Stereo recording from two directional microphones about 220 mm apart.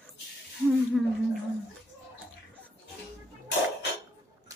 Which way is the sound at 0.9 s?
Centre (ahead or behind).